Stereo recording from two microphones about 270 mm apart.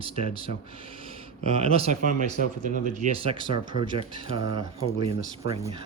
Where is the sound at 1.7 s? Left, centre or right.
Right.